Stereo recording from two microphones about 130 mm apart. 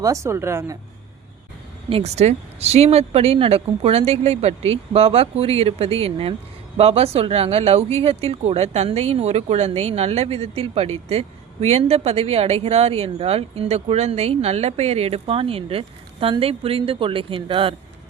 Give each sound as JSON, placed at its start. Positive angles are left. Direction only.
{"t": 0.0, "sound": "speech", "side_deg": -25}
{"t": 1.9, "sound": "speech", "side_deg": -55}